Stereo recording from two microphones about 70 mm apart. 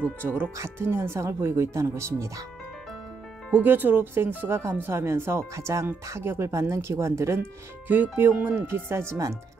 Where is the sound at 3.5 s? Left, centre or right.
Right.